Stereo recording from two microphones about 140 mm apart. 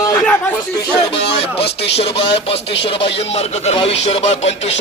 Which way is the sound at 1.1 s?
45° left (ahead or behind).